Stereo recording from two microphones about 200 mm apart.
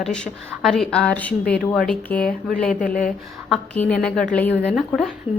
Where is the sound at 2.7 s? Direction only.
45° left (ahead or behind).